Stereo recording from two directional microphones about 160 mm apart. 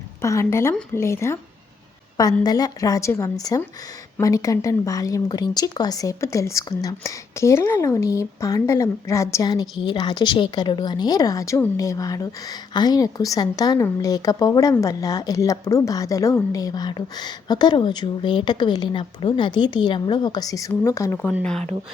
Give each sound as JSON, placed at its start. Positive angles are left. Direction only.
{"t": 0.2, "sound": "a woman's voice", "side_deg": 15}
{"t": 2.4, "sound": "speech", "side_deg": 25}